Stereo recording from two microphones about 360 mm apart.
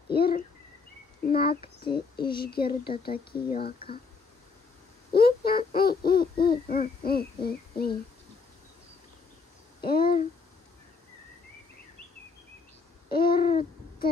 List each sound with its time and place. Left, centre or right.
0.1 s hoot: left
1.3 s speech: centre
2.4 s hoot: left
3.1 s speech: centre
3.5 s hoot: left
5.1 s hoot: left
9.8 s hoot: left
13.3 s a sound: left